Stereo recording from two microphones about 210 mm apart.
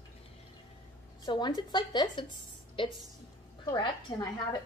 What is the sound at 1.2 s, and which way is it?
Speech, 20° left (ahead or behind).